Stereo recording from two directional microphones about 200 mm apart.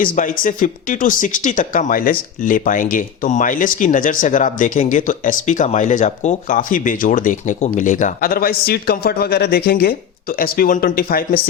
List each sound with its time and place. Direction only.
0.0 s speech: 40° left (ahead or behind)